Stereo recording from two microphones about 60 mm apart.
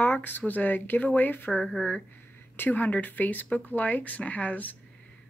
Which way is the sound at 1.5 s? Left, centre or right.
Centre.